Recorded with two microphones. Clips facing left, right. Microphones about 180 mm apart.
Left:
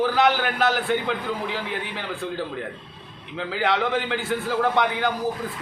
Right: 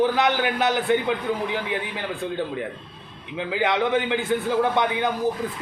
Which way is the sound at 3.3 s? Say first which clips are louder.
Right 1 dB; 15° right (ahead or behind).